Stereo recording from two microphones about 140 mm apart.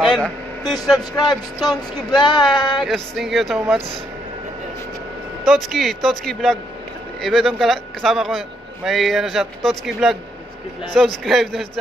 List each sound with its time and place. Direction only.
0.1 s vehicle: 5° left (ahead or behind)
1.1 s speech: 30° left (ahead or behind)
2.8 s a man's voice: centre (ahead or behind)
5.4 s a man's voice: centre (ahead or behind)
11.2 s a man's voice: centre (ahead or behind)